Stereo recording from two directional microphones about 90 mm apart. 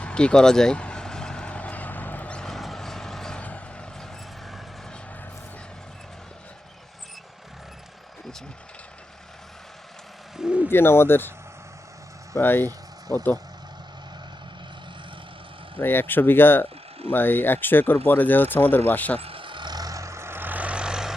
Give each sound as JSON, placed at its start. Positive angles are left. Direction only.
{"t": 0.0, "sound": "vehicle", "side_deg": 10}
{"t": 10.3, "sound": "a sound", "side_deg": -10}
{"t": 10.7, "sound": "speech", "side_deg": 25}
{"t": 12.4, "sound": "speech", "side_deg": 25}
{"t": 15.8, "sound": "speech", "side_deg": 25}
{"t": 19.2, "sound": "vehicle", "side_deg": -80}